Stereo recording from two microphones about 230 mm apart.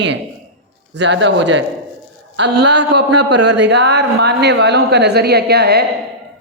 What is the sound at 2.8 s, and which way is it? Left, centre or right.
Speech, right.